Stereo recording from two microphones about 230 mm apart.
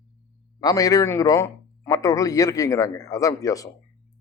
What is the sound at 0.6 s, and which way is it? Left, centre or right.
A man's voice, centre.